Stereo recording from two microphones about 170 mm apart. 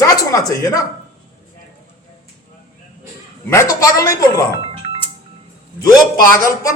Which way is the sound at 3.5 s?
15° left (ahead or behind).